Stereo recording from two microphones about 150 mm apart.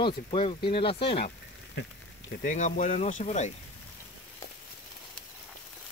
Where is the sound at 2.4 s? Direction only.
55° left (ahead or behind).